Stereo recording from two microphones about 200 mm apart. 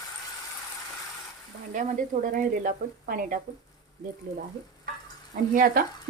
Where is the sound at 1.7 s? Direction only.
40° right (ahead or behind).